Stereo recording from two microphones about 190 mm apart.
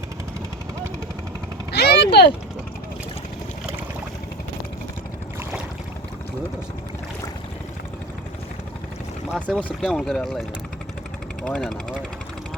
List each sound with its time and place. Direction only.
1.7 s vehicle: 60° left (ahead or behind)
9.3 s speech: 5° left (ahead or behind)
11.4 s speech: 5° left (ahead or behind)